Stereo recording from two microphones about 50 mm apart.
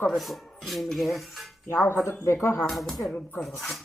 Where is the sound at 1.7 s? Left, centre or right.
Left.